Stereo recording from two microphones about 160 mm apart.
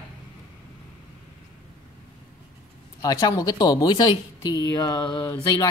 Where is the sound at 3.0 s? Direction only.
25° left (ahead or behind).